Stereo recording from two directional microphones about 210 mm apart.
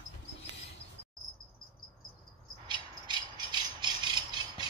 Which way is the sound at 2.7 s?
20° right (ahead or behind).